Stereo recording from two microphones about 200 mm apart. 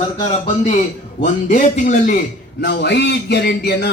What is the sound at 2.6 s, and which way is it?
A man's voice, 60° left (ahead or behind).